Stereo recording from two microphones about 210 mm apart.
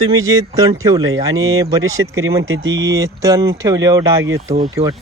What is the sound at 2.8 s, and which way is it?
Speech, 15° right (ahead or behind).